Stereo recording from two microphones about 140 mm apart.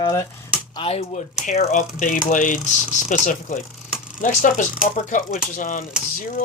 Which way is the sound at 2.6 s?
60° left (ahead or behind).